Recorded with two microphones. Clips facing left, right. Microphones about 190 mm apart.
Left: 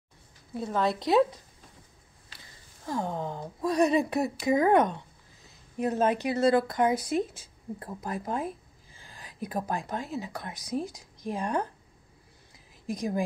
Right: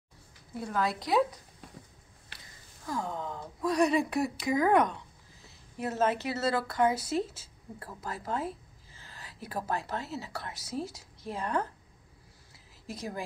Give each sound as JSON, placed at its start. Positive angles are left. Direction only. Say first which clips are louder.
{"t": 0.6, "sound": "speech", "louder": "left 3 dB", "side_deg": 25}
{"t": 2.8, "sound": "a woman's voice", "louder": "left 3 dB", "side_deg": 25}
{"t": 12.8, "sound": "a woman's voice", "louder": "left 8 dB", "side_deg": 15}